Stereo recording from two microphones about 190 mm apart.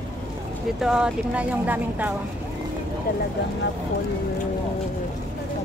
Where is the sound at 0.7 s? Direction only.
5° right (ahead or behind).